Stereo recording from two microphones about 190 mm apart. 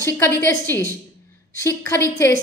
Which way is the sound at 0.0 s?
15° left (ahead or behind).